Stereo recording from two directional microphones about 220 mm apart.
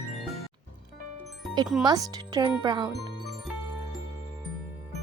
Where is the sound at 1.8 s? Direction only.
20° right (ahead or behind).